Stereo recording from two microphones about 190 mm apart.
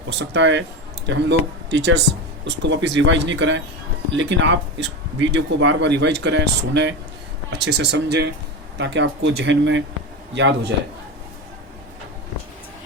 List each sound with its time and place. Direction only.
0.2 s speech: 70° right (ahead or behind)